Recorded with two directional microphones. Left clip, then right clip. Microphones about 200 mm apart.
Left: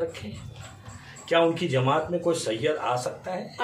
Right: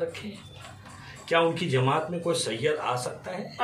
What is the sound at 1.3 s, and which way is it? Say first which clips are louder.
Speech: left 2 dB; centre (ahead or behind).